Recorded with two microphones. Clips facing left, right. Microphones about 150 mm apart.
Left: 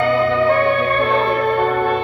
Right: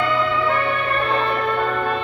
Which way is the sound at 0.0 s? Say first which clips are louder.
Left 5 dB; 45° left (ahead or behind).